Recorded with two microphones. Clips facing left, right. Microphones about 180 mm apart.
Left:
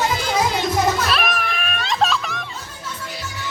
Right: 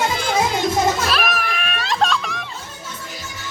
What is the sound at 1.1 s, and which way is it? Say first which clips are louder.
Music: even; centre (ahead or behind).